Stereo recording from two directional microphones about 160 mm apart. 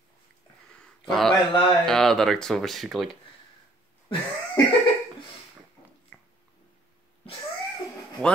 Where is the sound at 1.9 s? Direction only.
5° left (ahead or behind).